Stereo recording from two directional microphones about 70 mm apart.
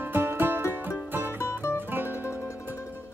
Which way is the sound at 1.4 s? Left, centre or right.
Left.